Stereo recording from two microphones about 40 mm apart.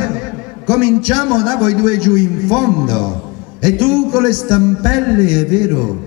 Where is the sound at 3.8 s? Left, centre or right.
Centre.